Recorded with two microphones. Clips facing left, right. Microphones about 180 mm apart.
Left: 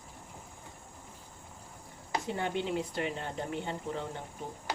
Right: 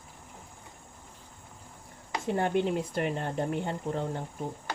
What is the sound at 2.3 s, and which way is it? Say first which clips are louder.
Speech: right 7 dB; 50° right (ahead or behind).